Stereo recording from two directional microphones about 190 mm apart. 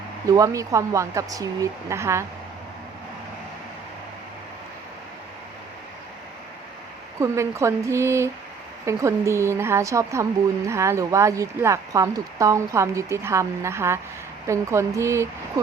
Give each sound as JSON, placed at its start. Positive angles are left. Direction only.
{"t": 0.3, "sound": "speech", "side_deg": -15}
{"t": 7.2, "sound": "speech", "side_deg": -15}